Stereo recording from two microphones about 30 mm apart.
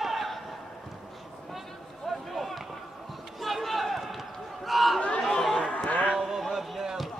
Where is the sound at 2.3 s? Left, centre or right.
Centre.